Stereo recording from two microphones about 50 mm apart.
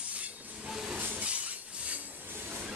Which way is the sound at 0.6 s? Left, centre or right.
Centre.